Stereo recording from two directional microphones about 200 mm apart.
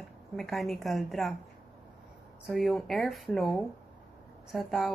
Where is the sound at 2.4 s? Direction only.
Centre (ahead or behind).